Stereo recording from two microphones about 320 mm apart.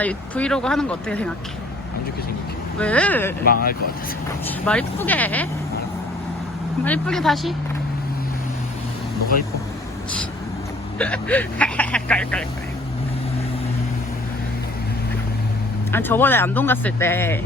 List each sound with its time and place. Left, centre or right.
0.0 s speech: centre
2.7 s speech: centre
3.4 s speech: left
4.4 s speech: centre
6.8 s speech: centre
10.9 s speech: centre
15.9 s speech: centre